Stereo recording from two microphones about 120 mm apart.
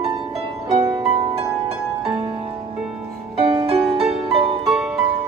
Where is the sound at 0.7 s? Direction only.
35° right (ahead or behind).